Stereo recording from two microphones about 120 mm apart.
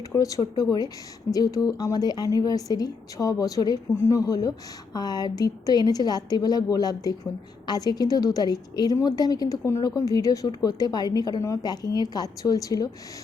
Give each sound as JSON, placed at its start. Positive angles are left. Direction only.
{"t": 0.1, "sound": "a woman's voice", "side_deg": 30}